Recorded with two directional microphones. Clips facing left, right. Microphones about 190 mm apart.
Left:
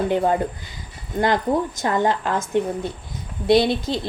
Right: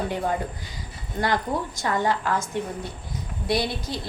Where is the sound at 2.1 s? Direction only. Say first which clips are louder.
Left 2 dB; 25° left (ahead or behind).